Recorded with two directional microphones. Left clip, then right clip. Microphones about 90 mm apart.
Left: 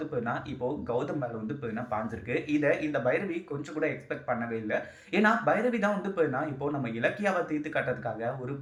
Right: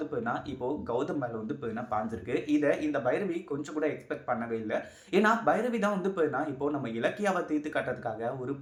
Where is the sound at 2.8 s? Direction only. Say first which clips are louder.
Left 1 dB; 30° right (ahead or behind).